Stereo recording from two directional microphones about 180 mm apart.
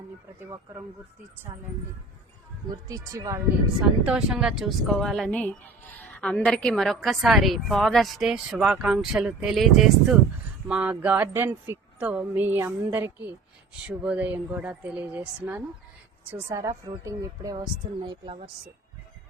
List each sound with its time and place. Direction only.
0.3 s speech: 15° right (ahead or behind)
2.9 s speech: 20° right (ahead or behind)
4.0 s a woman's voice: 5° right (ahead or behind)
16.3 s a woman's voice: 15° right (ahead or behind)